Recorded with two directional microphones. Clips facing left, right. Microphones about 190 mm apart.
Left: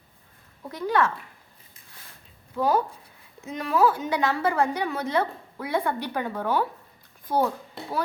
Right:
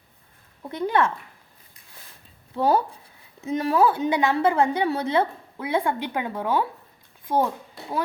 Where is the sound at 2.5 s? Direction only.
30° right (ahead or behind).